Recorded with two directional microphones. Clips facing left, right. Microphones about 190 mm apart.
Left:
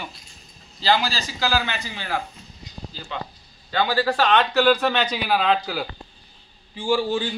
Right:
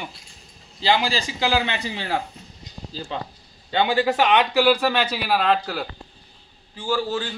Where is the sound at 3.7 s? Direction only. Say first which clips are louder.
Right 2 dB; 25° right (ahead or behind); by 5.9 s centre (ahead or behind).